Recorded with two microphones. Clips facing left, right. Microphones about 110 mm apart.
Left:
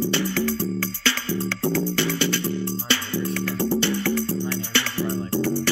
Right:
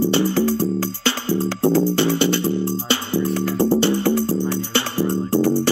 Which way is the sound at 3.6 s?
40° right (ahead or behind).